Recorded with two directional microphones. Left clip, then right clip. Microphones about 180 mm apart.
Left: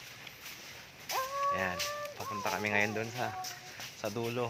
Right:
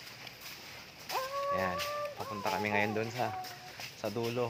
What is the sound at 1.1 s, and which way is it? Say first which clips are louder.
Livestock: left 1 dB; 50° right (ahead or behind).